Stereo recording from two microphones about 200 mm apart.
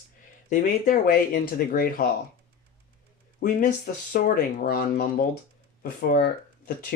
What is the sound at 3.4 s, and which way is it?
Speech, 45° left (ahead or behind).